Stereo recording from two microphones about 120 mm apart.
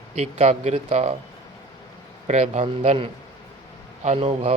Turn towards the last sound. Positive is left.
turn(degrees=-55)  # may be behind; listen again after turning